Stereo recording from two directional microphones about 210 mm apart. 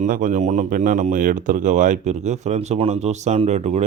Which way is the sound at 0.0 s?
40° right (ahead or behind).